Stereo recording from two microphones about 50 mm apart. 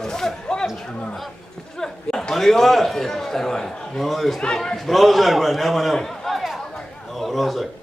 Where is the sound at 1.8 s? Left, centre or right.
Centre.